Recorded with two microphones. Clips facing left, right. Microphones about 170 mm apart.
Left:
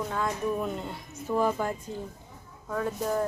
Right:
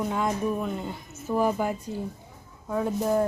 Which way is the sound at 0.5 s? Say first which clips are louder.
Right 1 dB; centre (ahead or behind).